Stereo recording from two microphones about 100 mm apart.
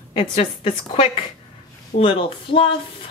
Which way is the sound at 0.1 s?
75° left (ahead or behind).